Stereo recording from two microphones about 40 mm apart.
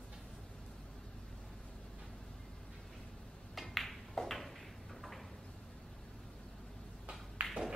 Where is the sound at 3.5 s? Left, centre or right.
Centre.